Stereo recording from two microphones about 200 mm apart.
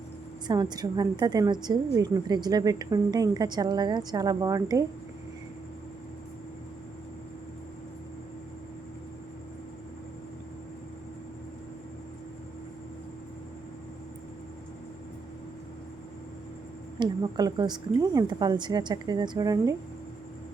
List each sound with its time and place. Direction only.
0.4 s a woman's voice: 20° right (ahead or behind)
17.0 s a woman's voice: 20° right (ahead or behind)